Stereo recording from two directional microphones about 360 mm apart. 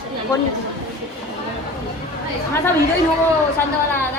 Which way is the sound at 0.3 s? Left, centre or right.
Centre.